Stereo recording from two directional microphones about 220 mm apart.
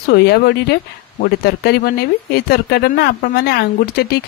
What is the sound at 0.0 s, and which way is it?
Speech, 45° left (ahead or behind).